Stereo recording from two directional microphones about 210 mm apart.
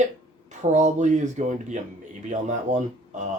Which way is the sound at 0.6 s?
35° right (ahead or behind).